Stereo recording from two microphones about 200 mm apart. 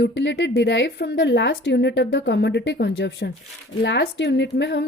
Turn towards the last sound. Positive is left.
turn(degrees=60)  # may be behind; listen again after turning